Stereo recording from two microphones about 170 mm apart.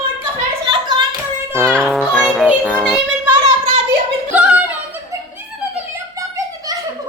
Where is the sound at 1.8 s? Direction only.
Centre (ahead or behind).